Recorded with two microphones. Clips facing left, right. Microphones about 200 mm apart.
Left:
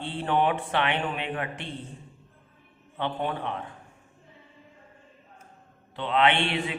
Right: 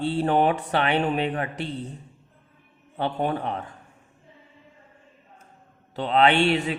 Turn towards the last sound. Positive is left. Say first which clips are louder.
# right 5 dB
turn(degrees=-40)  # may be behind; listen again after turning